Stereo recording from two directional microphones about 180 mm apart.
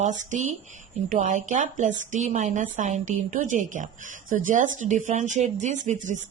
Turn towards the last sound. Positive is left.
turn(degrees=-45)  # may be behind; listen again after turning